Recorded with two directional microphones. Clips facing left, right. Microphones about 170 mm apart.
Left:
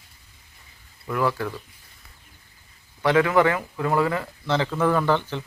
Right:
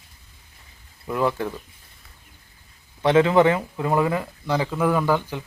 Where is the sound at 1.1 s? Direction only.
20° right (ahead or behind).